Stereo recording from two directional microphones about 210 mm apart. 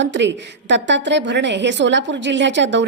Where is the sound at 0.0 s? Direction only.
60° right (ahead or behind).